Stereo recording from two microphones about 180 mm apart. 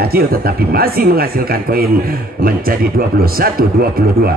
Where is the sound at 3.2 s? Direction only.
55° right (ahead or behind).